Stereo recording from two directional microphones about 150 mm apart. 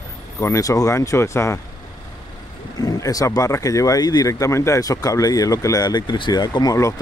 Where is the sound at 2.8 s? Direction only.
25° left (ahead or behind).